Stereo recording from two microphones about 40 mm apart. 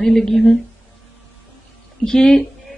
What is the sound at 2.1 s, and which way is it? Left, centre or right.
Speech, left.